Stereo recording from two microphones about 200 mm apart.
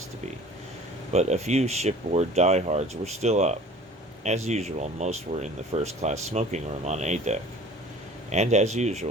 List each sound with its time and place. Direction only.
1.1 s speech: 35° right (ahead or behind)